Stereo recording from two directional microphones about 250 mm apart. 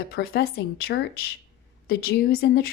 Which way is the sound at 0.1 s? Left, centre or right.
Left.